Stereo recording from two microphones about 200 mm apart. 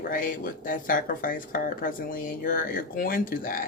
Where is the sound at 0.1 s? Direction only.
45° left (ahead or behind).